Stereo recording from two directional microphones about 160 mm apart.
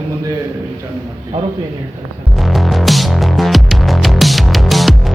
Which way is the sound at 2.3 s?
Centre (ahead or behind).